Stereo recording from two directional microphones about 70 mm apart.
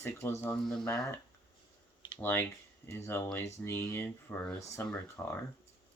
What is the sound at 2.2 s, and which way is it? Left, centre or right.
Speech, left.